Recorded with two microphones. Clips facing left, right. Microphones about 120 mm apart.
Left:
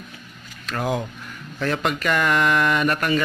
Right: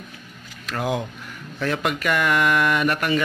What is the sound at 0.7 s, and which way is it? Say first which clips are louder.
A man's voice: even; 10° right (ahead or behind).